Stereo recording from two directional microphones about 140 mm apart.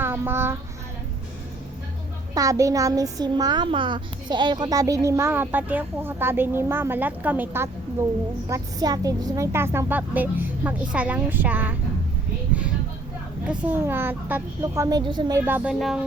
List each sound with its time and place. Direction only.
0.0 s child singing: 15° right (ahead or behind)
2.3 s a woman's voice: 25° right (ahead or behind)
13.5 s a woman's voice: 15° right (ahead or behind)
14.6 s a woman's voice: 25° right (ahead or behind)
15.4 s a woman's voice: 15° right (ahead or behind)
15.8 s speech: centre (ahead or behind)